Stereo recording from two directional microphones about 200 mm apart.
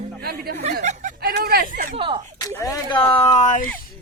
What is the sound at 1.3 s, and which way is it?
Speech, 50° right (ahead or behind).